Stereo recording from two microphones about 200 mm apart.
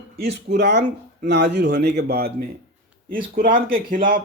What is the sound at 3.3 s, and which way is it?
Speech, 45° right (ahead or behind).